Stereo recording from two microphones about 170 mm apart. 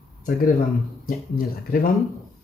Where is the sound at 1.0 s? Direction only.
60° left (ahead or behind).